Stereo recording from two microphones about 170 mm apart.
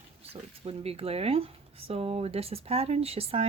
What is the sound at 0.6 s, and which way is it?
Speech, 35° right (ahead or behind).